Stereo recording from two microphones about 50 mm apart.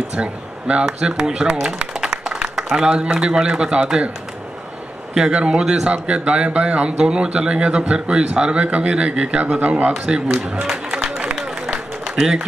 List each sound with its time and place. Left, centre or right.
0.1 s speech: right
2.5 s a sound: centre
2.9 s speech: centre
5.1 s speech: centre
10.9 s run: centre
12.2 s a man's voice: centre